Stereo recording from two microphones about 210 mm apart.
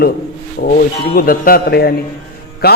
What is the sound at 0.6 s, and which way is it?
A man's voice, 45° left (ahead or behind).